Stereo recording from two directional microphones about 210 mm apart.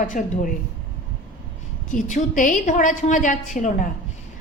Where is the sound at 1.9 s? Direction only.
40° left (ahead or behind).